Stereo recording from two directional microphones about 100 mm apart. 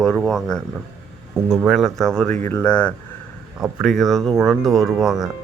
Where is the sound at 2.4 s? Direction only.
15° left (ahead or behind).